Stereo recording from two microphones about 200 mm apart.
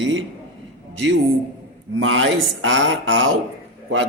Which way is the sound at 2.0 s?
85° right.